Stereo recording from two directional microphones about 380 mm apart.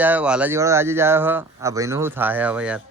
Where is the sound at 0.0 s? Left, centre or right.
Centre.